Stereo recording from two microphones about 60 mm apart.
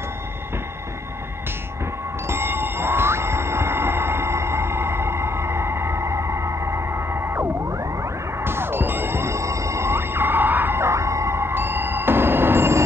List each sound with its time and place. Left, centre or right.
2.2 s music: right
8.5 s music: right